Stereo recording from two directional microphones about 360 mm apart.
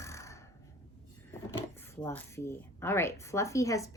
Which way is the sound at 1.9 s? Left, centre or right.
Centre.